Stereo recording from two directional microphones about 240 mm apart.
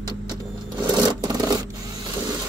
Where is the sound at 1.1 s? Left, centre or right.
Centre.